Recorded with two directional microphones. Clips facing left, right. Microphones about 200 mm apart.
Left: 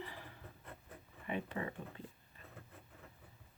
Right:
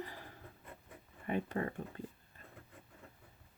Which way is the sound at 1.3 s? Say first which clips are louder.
Right 4 dB; 45° right (ahead or behind).